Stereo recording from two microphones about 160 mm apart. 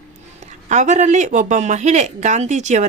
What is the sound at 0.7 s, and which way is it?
Speech, 45° right (ahead or behind).